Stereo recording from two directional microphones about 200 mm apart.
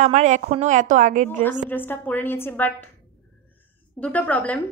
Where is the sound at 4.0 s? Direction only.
5° left (ahead or behind).